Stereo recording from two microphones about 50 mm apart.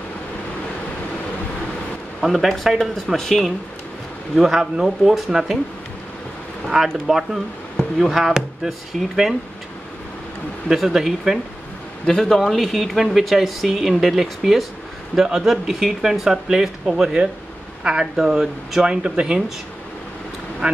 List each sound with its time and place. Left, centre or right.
2.1 s speech: centre
3.2 s speech: centre
4.4 s speech: centre
6.7 s speech: centre
8.0 s speech: centre
10.7 s speech: centre
12.1 s speech: centre
18.9 s speech: centre
20.6 s speech: right